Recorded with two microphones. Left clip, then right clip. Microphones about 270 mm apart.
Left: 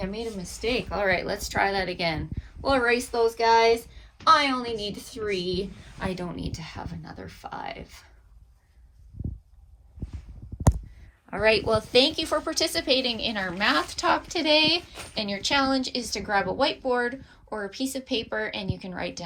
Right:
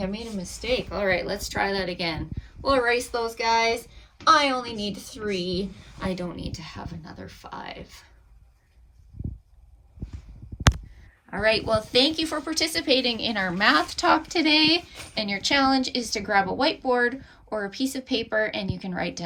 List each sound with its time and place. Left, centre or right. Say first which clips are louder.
0.1 s a woman's voice: left 1 dB; left
11.3 s a woman's voice: even; centre